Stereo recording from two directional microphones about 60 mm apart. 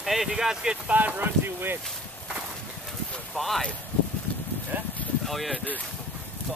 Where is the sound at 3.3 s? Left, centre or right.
Centre.